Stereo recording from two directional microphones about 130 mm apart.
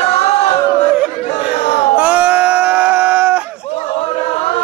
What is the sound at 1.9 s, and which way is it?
Sheep, 10° right (ahead or behind).